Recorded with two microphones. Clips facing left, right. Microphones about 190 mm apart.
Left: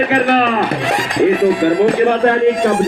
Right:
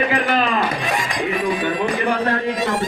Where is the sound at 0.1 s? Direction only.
60° left (ahead or behind).